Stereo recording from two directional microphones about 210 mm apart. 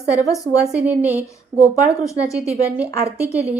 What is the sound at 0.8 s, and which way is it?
Speech, 10° right (ahead or behind).